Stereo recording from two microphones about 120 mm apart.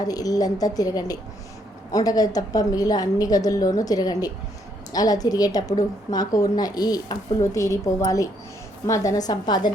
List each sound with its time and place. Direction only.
0.0 s a woman's voice: 30° left (ahead or behind)